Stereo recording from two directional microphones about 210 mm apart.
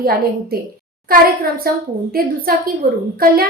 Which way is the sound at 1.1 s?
45° right (ahead or behind).